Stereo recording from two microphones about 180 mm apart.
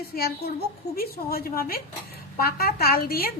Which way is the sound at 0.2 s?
60° left (ahead or behind).